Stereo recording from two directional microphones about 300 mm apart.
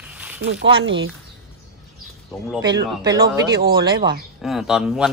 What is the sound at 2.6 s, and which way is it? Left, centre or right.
Speech, centre.